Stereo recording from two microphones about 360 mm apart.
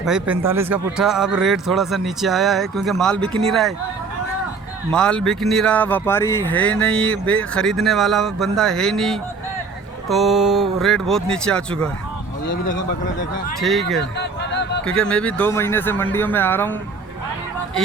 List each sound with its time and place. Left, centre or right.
0.0 s speech: centre
4.9 s speech: centre
13.6 s speech: centre
14.2 s a sound: left
14.8 s speech: centre